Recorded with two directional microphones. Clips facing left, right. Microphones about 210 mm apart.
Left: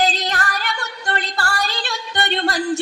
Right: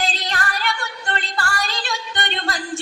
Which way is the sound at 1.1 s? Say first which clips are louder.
Left 2 dB; 40° left (ahead or behind).